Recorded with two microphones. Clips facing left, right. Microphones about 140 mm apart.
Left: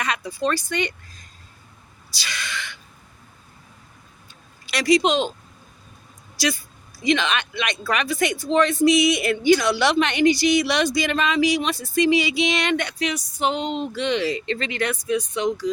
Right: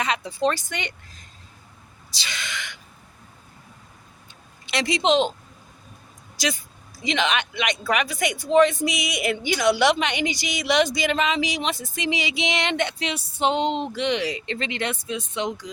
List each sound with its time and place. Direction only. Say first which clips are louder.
0.0 s speech: right 1 dB; 25° right (ahead or behind)
2.0 s a sound: left 2 dB; 20° right (ahead or behind)
4.6 s speech: left 4 dB; 25° right (ahead or behind)
6.3 s speech: left 3 dB; 20° right (ahead or behind)